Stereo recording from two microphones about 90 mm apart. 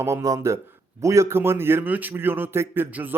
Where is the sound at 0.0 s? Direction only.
35° right (ahead or behind).